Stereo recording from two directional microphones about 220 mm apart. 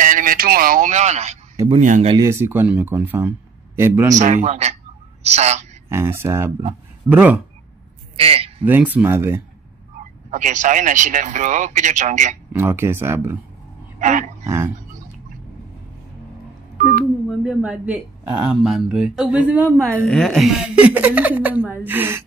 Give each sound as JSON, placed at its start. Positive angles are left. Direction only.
{"t": 0.0, "sound": "speech", "side_deg": -35}
{"t": 2.1, "sound": "a woman's voice", "side_deg": -10}
{"t": 4.1, "sound": "speech", "side_deg": -35}
{"t": 5.9, "sound": "a woman's voice", "side_deg": -10}
{"t": 8.2, "sound": "speech", "side_deg": -25}
{"t": 8.6, "sound": "a woman's voice", "side_deg": -10}
{"t": 10.3, "sound": "speech", "side_deg": -35}
{"t": 12.5, "sound": "a woman's voice", "side_deg": -10}
{"t": 13.9, "sound": "a sound", "side_deg": -35}
{"t": 14.4, "sound": "speech", "side_deg": -10}
{"t": 17.3, "sound": "speech", "side_deg": 0}
{"t": 20.0, "sound": "a woman's voice", "side_deg": 5}